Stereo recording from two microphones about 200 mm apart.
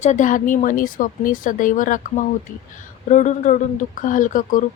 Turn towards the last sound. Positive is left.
turn(degrees=40)  # may be behind; listen again after turning